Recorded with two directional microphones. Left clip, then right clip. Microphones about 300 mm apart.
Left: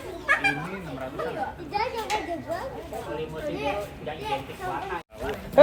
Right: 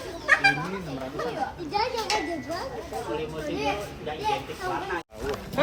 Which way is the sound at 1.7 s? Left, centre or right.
Right.